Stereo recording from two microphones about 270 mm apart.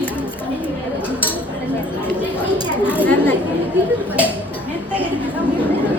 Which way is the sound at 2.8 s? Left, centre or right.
Centre.